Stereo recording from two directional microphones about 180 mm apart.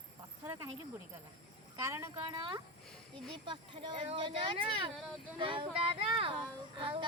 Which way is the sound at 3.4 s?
25° right (ahead or behind).